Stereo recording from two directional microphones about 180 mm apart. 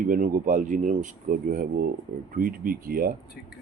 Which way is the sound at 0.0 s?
50° right (ahead or behind).